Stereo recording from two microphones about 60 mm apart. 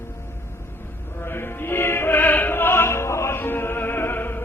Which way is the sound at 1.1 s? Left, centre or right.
Left.